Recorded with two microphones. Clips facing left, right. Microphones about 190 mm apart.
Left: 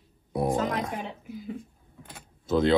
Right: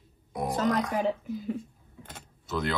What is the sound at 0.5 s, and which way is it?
Speech, 40° right (ahead or behind).